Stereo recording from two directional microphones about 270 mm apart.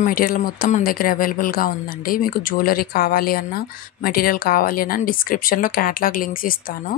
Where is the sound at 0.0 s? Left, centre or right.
Left.